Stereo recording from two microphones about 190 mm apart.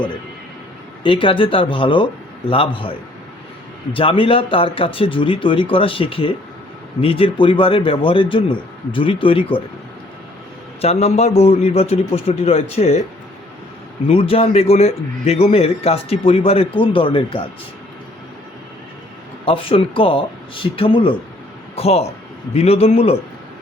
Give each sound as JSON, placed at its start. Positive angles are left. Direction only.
{"t": 1.0, "sound": "speech", "side_deg": 25}
{"t": 3.9, "sound": "speech", "side_deg": 30}
{"t": 10.8, "sound": "a man's voice", "side_deg": 35}
{"t": 14.1, "sound": "a man's voice", "side_deg": 30}
{"t": 19.5, "sound": "a man's voice", "side_deg": 30}